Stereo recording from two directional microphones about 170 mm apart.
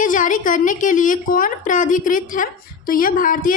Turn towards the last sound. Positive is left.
turn(degrees=55)  # may be behind; listen again after turning